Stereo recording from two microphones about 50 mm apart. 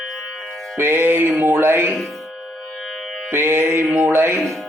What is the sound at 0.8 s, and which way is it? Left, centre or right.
Music, right.